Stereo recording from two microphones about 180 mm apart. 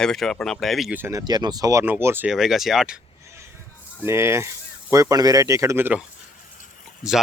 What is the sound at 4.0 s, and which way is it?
Speech, 15° right (ahead or behind).